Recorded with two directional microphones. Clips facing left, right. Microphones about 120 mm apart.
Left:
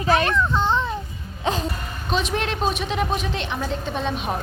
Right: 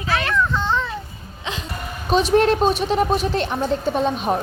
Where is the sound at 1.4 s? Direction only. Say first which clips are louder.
Left 6 dB; 40° left (ahead or behind).